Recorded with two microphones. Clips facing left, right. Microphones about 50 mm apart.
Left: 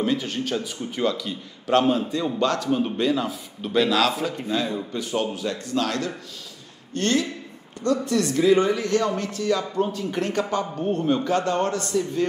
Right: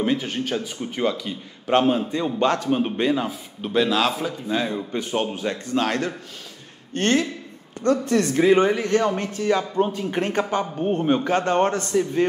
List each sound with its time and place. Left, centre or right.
0.0 s a man's voice: right
4.5 s a man's voice: right